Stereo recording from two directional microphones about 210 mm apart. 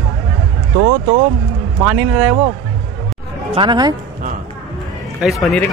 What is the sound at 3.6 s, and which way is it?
Speech, 20° right (ahead or behind).